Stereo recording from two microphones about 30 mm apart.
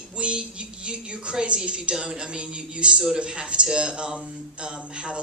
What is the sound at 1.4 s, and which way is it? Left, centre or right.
Speech, right.